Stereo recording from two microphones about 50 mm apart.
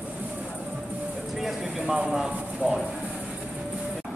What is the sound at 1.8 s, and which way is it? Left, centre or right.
Speech, centre.